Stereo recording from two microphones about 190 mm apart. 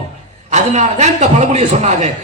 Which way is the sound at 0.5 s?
40° right (ahead or behind).